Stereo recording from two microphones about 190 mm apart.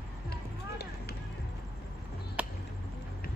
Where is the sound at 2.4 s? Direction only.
5° right (ahead or behind).